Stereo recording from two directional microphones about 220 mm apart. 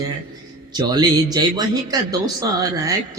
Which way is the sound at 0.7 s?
20° right (ahead or behind).